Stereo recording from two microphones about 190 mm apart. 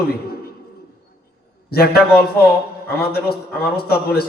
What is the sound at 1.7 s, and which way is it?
A man's voice, 55° left (ahead or behind).